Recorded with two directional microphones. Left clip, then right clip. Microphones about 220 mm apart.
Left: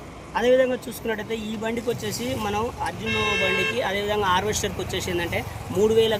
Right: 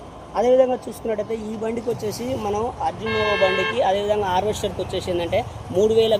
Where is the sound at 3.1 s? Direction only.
20° left (ahead or behind).